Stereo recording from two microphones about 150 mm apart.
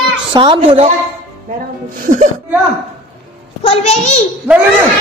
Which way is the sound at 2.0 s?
60° right (ahead or behind).